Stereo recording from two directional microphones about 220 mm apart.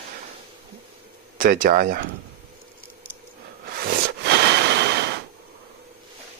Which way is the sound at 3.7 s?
45° right (ahead or behind).